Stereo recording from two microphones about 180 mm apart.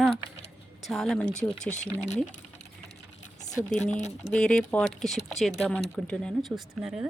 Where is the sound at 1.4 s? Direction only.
40° left (ahead or behind).